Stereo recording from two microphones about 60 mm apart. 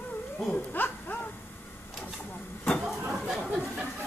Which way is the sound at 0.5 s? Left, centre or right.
Left.